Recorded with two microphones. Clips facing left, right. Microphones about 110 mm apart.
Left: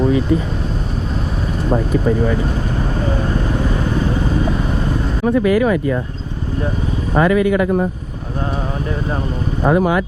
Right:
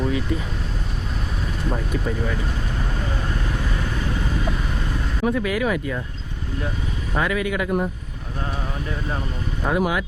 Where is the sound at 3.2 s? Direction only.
30° left (ahead or behind).